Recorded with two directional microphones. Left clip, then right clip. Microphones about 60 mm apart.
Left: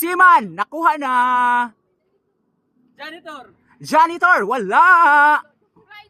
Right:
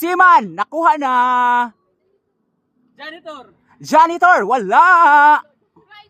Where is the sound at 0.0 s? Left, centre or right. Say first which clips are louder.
Right 1 dB; right.